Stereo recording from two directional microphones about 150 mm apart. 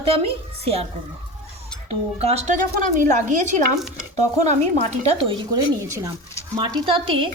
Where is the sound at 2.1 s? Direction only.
45° right (ahead or behind).